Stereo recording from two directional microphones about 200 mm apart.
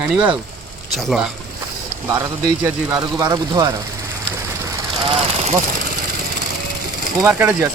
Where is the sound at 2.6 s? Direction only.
15° right (ahead or behind).